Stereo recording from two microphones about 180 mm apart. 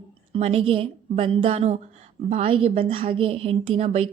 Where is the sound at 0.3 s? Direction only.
35° right (ahead or behind).